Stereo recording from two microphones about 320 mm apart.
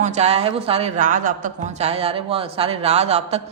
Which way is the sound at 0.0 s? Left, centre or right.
Right.